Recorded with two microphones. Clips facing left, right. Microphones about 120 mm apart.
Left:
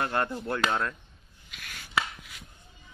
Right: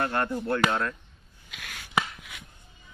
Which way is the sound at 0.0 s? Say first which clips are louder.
Right 2 dB; 20° left (ahead or behind).